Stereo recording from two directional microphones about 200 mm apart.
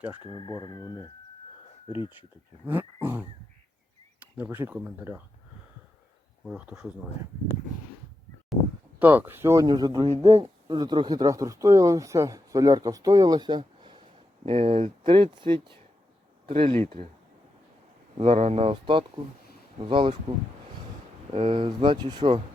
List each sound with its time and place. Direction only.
0.2 s speech: 25° left (ahead or behind)
2.6 s speech: 10° right (ahead or behind)
4.4 s speech: 10° right (ahead or behind)
6.4 s speech: centre (ahead or behind)
9.0 s speech: 10° right (ahead or behind); by 17.1 s 30° right (ahead or behind)
18.2 s speech: 30° right (ahead or behind)
21.3 s speech: 25° right (ahead or behind)